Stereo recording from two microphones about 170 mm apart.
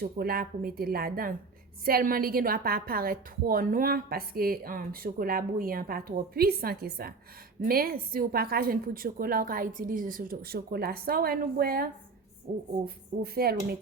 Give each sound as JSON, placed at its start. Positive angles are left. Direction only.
{"t": 0.0, "sound": "a woman's voice", "side_deg": -60}